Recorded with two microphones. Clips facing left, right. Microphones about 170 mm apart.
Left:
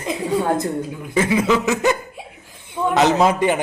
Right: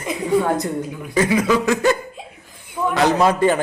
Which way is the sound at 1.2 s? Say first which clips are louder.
Even; 25° left (ahead or behind).